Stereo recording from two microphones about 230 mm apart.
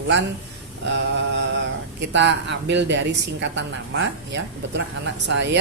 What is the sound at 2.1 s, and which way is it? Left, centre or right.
A woman's voice, right.